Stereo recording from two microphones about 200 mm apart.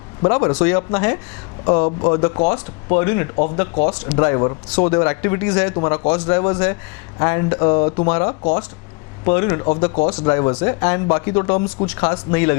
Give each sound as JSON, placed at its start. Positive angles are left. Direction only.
{"t": 0.2, "sound": "speech", "side_deg": 25}
{"t": 3.3, "sound": "speech", "side_deg": 35}